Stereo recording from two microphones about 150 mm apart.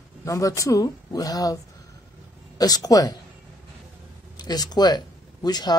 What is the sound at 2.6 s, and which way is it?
Speech, 25° left (ahead or behind).